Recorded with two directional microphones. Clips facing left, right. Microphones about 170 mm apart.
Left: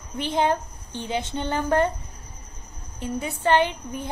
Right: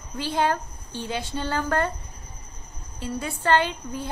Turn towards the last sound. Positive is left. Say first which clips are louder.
# left 3 dB
turn(degrees=20)  # may be behind; listen again after turning